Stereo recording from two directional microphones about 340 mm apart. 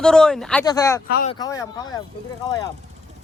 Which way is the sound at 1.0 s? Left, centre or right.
Left.